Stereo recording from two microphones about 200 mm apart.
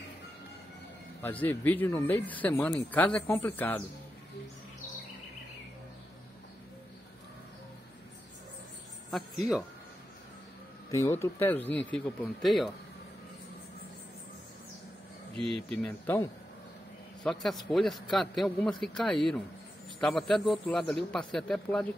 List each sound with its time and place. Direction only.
1.2 s speech: 10° left (ahead or behind)
9.1 s speech: centre (ahead or behind)
10.9 s speech: 15° left (ahead or behind)
15.5 s a man's voice: 5° left (ahead or behind)
17.2 s a man's voice: centre (ahead or behind)